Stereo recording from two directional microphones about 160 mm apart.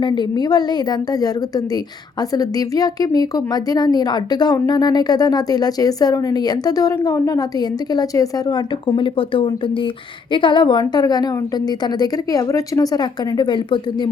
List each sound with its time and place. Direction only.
0.0 s speech: 30° left (ahead or behind)